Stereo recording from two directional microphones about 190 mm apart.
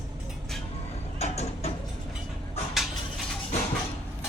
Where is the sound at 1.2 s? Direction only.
35° left (ahead or behind).